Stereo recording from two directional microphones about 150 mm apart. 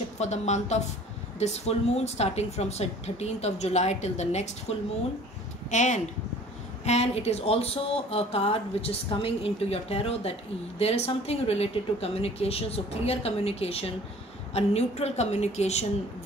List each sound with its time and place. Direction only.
0.2 s speech: 50° left (ahead or behind)